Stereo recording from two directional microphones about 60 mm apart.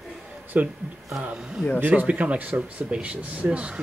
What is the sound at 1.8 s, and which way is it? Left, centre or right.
Speech, right.